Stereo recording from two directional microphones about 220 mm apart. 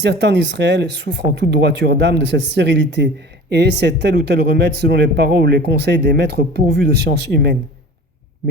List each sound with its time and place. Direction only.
0.0 s speech: 50° right (ahead or behind)